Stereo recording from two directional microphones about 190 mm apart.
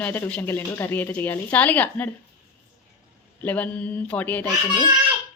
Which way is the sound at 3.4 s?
10° left (ahead or behind).